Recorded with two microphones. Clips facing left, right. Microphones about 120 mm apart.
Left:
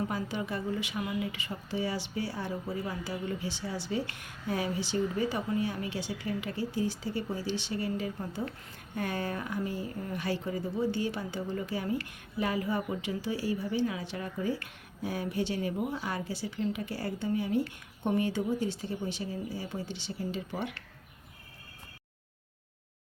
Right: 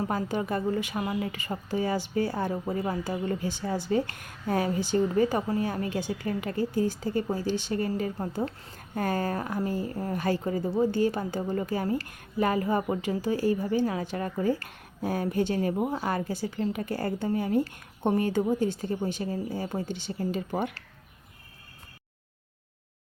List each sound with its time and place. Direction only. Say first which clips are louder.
0.1 s speech: right 5 dB; 45° right (ahead or behind)